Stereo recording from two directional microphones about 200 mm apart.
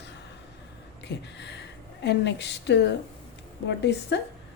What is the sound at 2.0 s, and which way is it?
Speech, 60° left (ahead or behind).